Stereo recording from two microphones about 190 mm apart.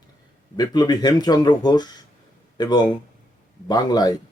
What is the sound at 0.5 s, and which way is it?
Speech, 20° left (ahead or behind).